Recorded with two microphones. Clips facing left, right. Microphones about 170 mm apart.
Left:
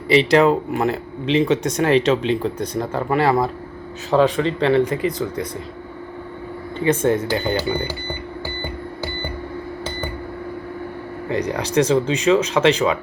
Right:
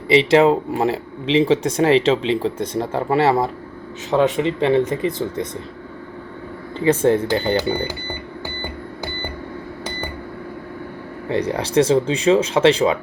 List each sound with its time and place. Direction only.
0.1 s speech: 25° right (ahead or behind)
6.8 s speech: 30° right (ahead or behind)
11.3 s speech: 30° right (ahead or behind)